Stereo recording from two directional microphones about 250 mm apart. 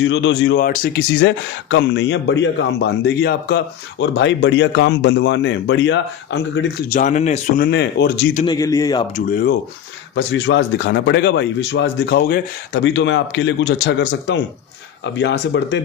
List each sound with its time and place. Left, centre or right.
0.0 s a man's voice: left
6.9 s speech: left
8.4 s a man's voice: centre
9.1 s speech: left
10.2 s a man's voice: left